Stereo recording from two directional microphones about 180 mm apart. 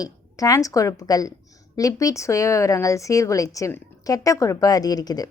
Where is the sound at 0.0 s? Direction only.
20° left (ahead or behind).